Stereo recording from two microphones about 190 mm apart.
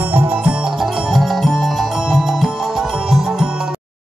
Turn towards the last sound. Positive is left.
turn(degrees=0)  # may be behind; listen again after turning